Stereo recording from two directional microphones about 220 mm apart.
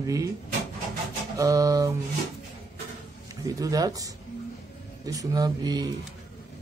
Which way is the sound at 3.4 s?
15° right (ahead or behind).